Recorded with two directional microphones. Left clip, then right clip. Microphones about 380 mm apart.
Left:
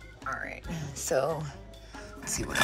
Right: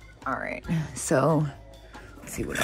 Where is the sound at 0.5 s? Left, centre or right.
Centre.